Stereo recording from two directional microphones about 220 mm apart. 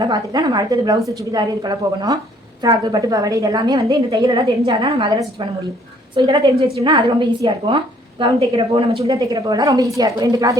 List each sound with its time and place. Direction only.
0.0 s a woman's voice: 20° right (ahead or behind)